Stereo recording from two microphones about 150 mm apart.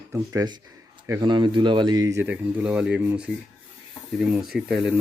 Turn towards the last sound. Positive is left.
turn(degrees=-5)  # may be behind; listen again after turning